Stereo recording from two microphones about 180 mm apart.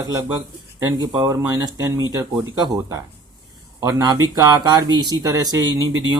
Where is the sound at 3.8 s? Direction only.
20° right (ahead or behind).